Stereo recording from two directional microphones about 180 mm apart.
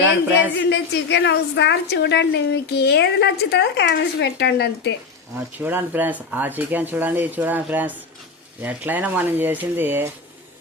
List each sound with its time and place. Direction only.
0.6 s a woman's voice: 90° left; by 4.9 s 70° left (ahead or behind)
5.5 s speech: 10° right (ahead or behind)